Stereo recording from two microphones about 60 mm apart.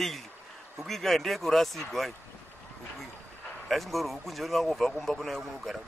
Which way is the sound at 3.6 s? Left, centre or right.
Centre.